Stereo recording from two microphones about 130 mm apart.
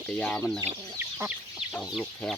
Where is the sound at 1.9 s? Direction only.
5° left (ahead or behind).